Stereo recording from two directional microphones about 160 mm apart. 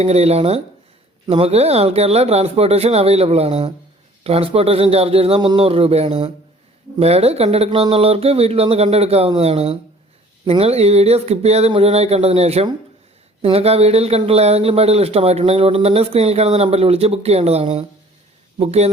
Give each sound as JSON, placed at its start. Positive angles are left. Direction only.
{"t": 0.0, "sound": "speech", "side_deg": -40}